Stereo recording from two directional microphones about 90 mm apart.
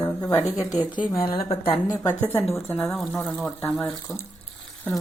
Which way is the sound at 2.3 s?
30° left (ahead or behind).